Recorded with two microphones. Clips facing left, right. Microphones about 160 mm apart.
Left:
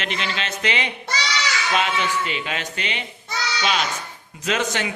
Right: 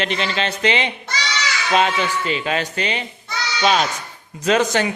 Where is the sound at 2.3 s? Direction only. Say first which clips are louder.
Right 6 dB; 35° right (ahead or behind).